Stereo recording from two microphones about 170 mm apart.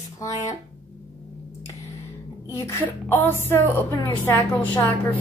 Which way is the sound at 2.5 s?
15° left (ahead or behind).